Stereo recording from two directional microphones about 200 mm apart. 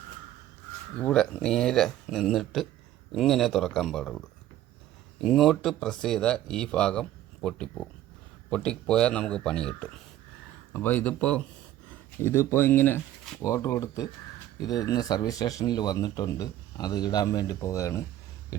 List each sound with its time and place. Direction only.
0.9 s speech: 5° left (ahead or behind)
5.2 s speech: centre (ahead or behind); by 18.0 s 15° left (ahead or behind)